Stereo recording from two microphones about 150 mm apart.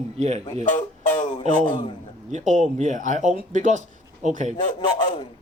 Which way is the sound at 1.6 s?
30° left (ahead or behind).